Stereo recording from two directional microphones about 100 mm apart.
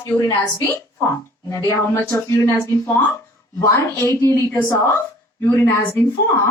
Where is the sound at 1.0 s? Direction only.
25° left (ahead or behind).